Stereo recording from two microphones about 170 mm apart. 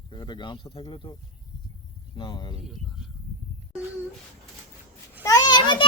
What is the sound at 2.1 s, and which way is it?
Speech, 25° left (ahead or behind).